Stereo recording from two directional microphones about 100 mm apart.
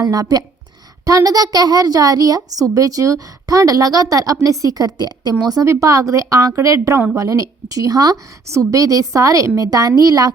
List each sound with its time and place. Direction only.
0.0 s a child's voice: 40° right (ahead or behind)